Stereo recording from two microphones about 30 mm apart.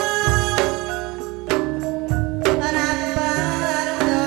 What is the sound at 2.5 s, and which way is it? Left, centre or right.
Music, centre.